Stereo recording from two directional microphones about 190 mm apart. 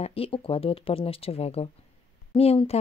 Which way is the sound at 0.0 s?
30° left (ahead or behind).